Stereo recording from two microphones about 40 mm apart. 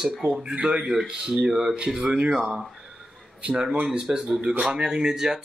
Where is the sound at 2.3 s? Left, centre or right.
Centre.